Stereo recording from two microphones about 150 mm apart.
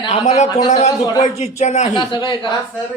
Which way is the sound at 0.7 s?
50° left (ahead or behind).